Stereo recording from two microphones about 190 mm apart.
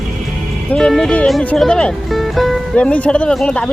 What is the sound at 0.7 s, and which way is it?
Speech, 5° left (ahead or behind).